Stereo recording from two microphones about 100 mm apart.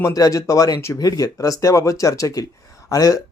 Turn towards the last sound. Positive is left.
turn(degrees=35)  # may be behind; listen again after turning